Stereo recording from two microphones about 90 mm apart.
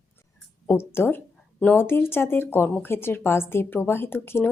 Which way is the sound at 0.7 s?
25° left (ahead or behind).